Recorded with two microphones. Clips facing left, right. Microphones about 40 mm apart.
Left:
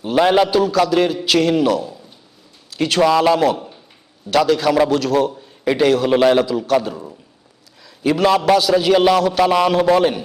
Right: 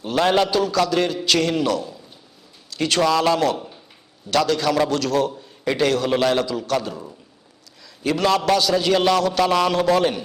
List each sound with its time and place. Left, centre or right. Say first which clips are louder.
0.0 s a man's voice: left 4 dB; centre